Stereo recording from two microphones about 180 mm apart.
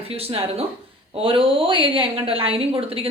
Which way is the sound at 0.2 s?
35° right (ahead or behind).